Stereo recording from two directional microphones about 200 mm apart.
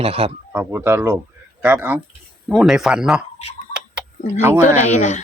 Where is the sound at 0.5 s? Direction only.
10° right (ahead or behind).